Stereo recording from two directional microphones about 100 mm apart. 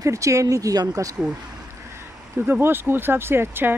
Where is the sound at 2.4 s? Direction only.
20° right (ahead or behind).